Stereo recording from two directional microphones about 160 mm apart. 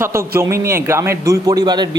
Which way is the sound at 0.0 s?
15° right (ahead or behind).